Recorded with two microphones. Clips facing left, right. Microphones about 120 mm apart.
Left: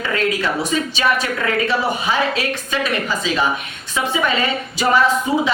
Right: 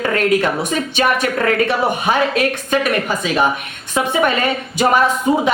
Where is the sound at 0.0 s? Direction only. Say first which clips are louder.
Right 5 dB; 50° right (ahead or behind).